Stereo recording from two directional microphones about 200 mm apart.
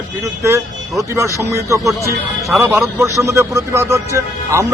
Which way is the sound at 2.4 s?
Centre (ahead or behind).